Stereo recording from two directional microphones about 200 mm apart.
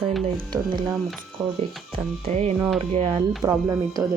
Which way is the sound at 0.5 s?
20° right (ahead or behind).